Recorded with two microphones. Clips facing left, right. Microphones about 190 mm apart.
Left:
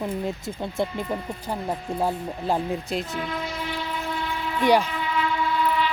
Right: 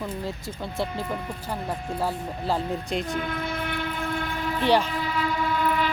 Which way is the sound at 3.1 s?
55° right (ahead or behind).